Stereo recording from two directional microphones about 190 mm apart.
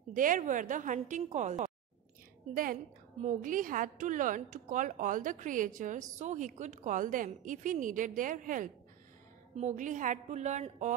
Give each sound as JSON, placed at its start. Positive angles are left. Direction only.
{"t": 0.1, "sound": "a woman's voice", "side_deg": -45}